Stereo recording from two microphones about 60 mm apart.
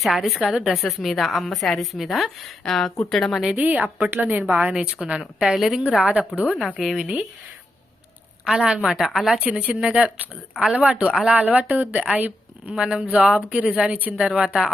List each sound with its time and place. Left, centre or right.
0.0 s a woman's voice: centre
3.5 s a woman's voice: right
4.7 s speech: centre
5.8 s a woman's voice: centre
6.7 s a woman's voice: centre
7.0 s speech: centre
8.4 s a woman's voice: centre
9.4 s a woman's voice: centre
13.5 s speech: centre